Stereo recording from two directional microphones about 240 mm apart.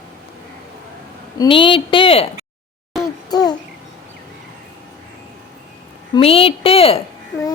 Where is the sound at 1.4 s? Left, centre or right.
Left.